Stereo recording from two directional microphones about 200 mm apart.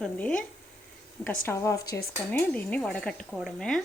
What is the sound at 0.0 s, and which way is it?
Speech, 5° left (ahead or behind).